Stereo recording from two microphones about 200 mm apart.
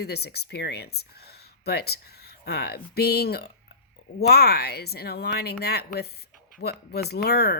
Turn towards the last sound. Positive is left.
turn(degrees=55)  # may be behind; listen again after turning